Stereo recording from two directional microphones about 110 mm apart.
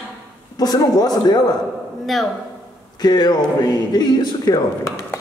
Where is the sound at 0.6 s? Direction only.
35° left (ahead or behind).